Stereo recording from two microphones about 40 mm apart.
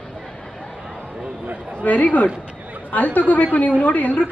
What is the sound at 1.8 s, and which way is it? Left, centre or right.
A woman's voice, left.